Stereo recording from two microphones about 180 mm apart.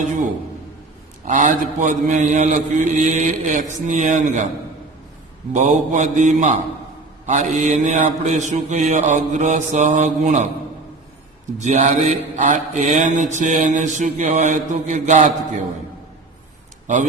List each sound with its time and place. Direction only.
1.2 s mantra: 45° right (ahead or behind)
5.5 s mantra: 45° right (ahead or behind)
11.5 s mantra: 40° right (ahead or behind)
16.8 s a man's voice: 40° right (ahead or behind)